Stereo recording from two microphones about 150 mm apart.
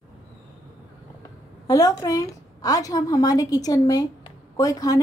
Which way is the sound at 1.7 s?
25° left (ahead or behind).